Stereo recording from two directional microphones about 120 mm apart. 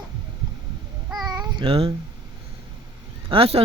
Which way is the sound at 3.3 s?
55° right (ahead or behind).